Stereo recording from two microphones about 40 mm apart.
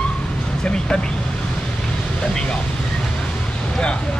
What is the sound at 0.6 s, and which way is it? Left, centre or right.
Speech, left.